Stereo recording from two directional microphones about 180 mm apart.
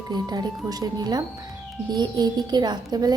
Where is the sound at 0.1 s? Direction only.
20° right (ahead or behind).